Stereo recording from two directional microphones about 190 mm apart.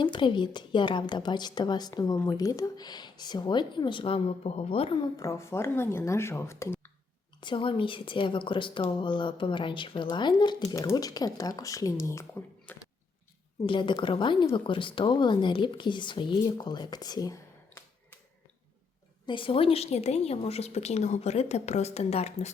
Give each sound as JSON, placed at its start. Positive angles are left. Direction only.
{"t": 0.0, "sound": "a woman's voice", "side_deg": 25}
{"t": 5.1, "sound": "speech", "side_deg": 15}
{"t": 7.4, "sound": "a woman's voice", "side_deg": 25}
{"t": 13.7, "sound": "a woman's voice", "side_deg": 25}
{"t": 19.2, "sound": "a woman's voice", "side_deg": 25}